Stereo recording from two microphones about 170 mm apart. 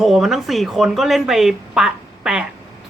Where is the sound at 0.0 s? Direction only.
Centre (ahead or behind).